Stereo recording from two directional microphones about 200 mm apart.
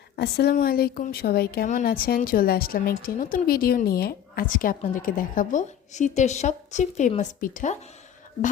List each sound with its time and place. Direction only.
0.2 s speech: 55° left (ahead or behind)